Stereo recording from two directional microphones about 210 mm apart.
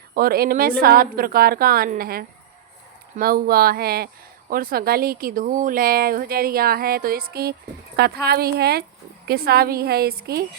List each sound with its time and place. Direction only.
0.1 s speech: 45° right (ahead or behind)